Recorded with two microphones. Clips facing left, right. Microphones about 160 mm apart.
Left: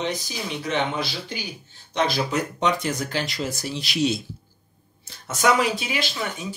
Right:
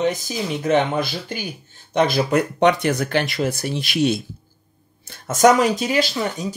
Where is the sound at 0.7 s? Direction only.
50° right (ahead or behind).